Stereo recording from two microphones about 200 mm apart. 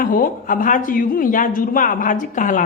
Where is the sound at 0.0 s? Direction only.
45° left (ahead or behind).